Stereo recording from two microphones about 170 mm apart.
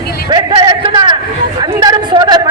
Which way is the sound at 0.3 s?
25° right (ahead or behind).